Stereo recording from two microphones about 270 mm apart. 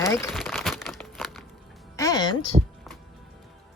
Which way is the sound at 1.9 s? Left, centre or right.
Centre.